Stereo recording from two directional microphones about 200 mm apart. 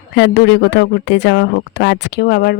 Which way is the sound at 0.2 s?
60° left (ahead or behind).